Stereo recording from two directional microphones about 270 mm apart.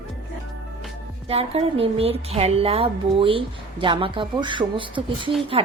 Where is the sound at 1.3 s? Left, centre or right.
Right.